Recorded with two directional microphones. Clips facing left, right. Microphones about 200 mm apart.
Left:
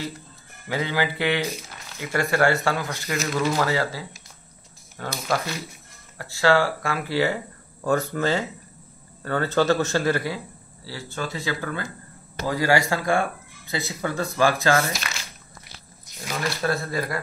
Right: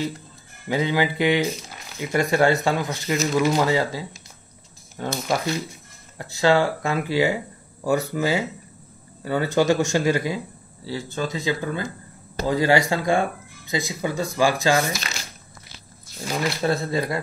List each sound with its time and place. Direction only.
0.7 s speech: 15° right (ahead or behind)
16.3 s speech: 20° right (ahead or behind)